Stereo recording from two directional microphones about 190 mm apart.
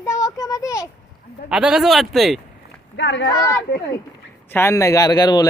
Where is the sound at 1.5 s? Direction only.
5° right (ahead or behind).